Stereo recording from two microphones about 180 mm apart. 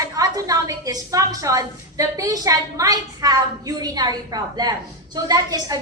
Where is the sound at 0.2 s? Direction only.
20° right (ahead or behind).